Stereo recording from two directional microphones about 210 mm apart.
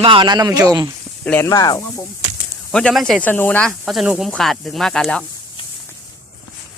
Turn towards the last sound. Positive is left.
turn(degrees=5)  # may be behind; listen again after turning